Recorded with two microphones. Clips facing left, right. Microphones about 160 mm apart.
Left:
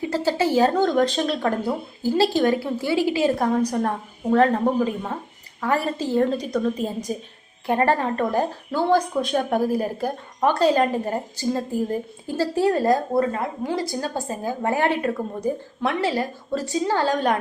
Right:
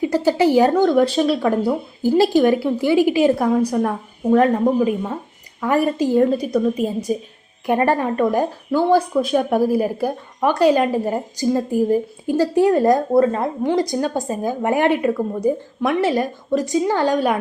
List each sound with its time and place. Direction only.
0.0 s speech: 15° right (ahead or behind)
5.6 s speech: 15° right (ahead or behind)